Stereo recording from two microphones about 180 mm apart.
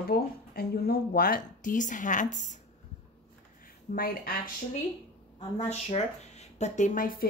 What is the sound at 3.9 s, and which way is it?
Speech, 55° left (ahead or behind).